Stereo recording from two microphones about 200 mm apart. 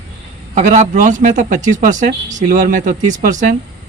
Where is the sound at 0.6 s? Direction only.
35° right (ahead or behind).